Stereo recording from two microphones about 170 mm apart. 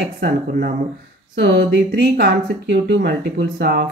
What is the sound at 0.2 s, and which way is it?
Speech, 70° right (ahead or behind).